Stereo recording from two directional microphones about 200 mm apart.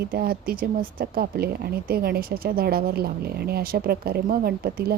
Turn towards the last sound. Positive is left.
turn(degrees=-50)  # may be behind; listen again after turning